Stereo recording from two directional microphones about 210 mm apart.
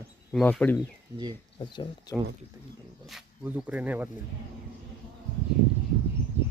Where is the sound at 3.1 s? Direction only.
5° right (ahead or behind).